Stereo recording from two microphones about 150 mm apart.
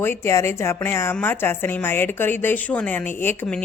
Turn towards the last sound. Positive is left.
turn(degrees=10)  # may be behind; listen again after turning